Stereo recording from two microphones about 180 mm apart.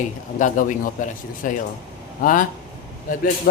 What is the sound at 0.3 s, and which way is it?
A man's voice, 45° left (ahead or behind).